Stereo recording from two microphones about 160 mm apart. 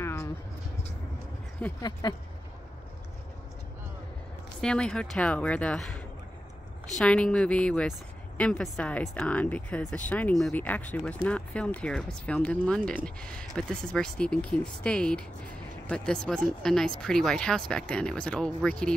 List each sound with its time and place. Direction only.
0.0 s vehicle: 15° left (ahead or behind)
1.8 s speech: 25° left (ahead or behind)
4.6 s speech: 5° left (ahead or behind)